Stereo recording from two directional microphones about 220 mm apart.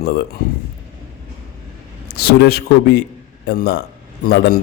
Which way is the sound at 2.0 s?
45° left (ahead or behind).